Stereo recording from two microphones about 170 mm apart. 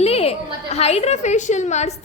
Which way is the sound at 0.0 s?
35° left (ahead or behind).